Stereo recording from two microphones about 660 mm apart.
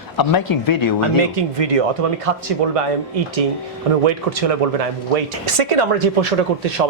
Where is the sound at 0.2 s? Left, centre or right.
Left.